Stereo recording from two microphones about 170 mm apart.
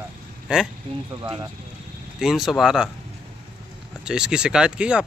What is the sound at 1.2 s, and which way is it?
Speech, 20° right (ahead or behind).